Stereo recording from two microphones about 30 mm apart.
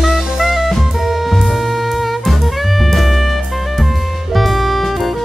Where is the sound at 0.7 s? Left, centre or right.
Centre.